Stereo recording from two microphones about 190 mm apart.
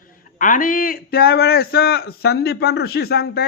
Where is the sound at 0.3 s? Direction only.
45° left (ahead or behind).